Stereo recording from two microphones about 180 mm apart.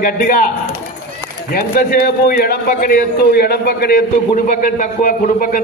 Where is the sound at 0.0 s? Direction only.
50° left (ahead or behind).